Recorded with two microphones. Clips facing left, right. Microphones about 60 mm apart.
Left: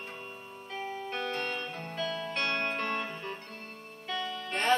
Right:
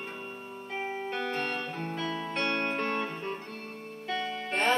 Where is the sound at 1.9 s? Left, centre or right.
Right.